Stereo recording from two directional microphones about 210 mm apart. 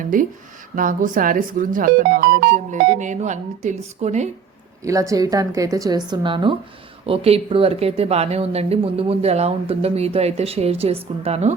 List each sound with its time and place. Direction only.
0.0 s speech: 40° right (ahead or behind)
2.5 s speech: 35° right (ahead or behind)
4.8 s a woman's voice: 15° right (ahead or behind)